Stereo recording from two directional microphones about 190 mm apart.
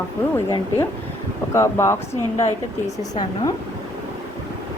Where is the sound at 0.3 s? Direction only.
15° left (ahead or behind).